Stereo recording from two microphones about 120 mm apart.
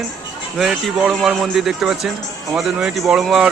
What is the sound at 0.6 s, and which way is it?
Speech, 5° right (ahead or behind).